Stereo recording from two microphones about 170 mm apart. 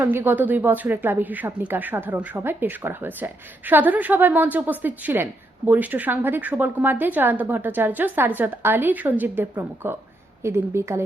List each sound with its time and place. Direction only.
0.0 s speech: 10° right (ahead or behind)